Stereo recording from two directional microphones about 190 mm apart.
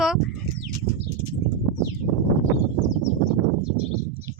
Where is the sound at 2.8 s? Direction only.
40° left (ahead or behind).